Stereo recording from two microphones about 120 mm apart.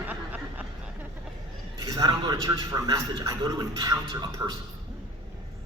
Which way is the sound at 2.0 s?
35° right (ahead or behind).